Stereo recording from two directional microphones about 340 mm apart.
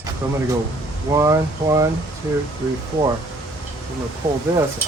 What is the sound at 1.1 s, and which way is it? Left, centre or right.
Speech, centre.